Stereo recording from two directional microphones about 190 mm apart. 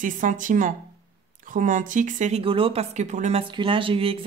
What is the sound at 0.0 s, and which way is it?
Speech, 45° right (ahead or behind).